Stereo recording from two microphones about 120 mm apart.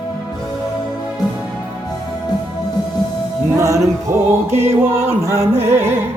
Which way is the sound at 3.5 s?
25° right (ahead or behind).